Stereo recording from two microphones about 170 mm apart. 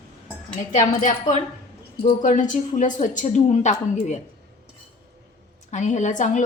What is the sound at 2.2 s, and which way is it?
A woman's voice, 50° left (ahead or behind).